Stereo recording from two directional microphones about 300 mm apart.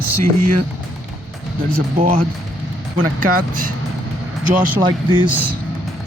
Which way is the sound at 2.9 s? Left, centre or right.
Right.